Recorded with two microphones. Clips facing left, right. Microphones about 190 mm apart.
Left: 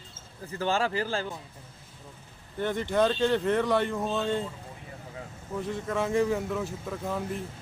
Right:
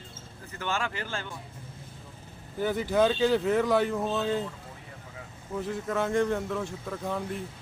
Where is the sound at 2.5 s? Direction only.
5° right (ahead or behind).